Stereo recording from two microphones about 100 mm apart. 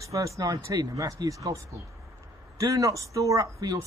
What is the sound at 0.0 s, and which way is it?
A man's voice, 35° right (ahead or behind).